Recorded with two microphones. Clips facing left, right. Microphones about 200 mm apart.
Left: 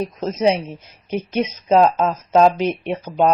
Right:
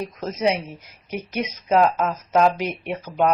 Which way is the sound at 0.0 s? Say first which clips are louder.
Left 4 dB; 25° left (ahead or behind).